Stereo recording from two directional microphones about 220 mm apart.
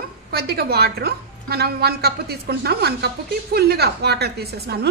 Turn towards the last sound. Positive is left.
turn(degrees=-45)  # may be behind; listen again after turning